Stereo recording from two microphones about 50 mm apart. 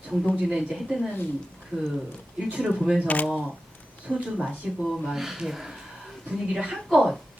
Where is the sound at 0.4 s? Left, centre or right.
Centre.